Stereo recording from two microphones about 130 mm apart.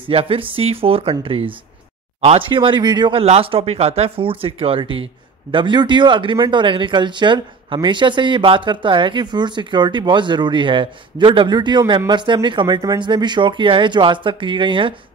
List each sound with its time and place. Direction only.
0.1 s speech: 45° right (ahead or behind)